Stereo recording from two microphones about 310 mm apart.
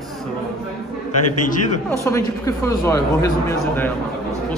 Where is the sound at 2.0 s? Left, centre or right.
Centre.